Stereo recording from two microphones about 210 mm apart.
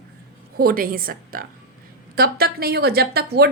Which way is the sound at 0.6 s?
45° right (ahead or behind).